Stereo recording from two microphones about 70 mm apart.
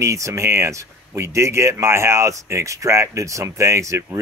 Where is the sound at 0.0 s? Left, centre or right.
Right.